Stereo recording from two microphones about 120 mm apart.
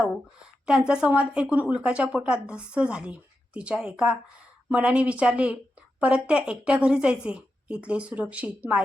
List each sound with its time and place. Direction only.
0.6 s speech: 5° right (ahead or behind)